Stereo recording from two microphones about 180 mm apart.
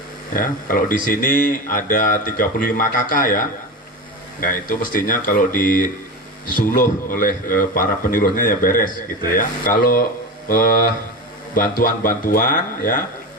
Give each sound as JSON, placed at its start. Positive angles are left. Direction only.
{"t": 0.3, "sound": "speech", "side_deg": 50}
{"t": 11.5, "sound": "speech", "side_deg": 50}